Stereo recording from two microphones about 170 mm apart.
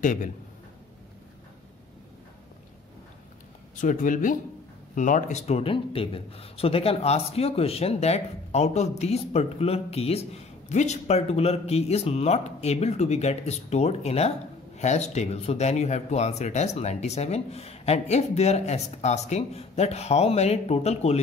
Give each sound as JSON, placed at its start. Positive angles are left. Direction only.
{"t": 0.0, "sound": "speech", "side_deg": 50}
{"t": 3.7, "sound": "a man's voice", "side_deg": 50}